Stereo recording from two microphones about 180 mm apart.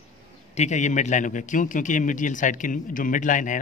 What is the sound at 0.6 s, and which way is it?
Speech, 40° left (ahead or behind).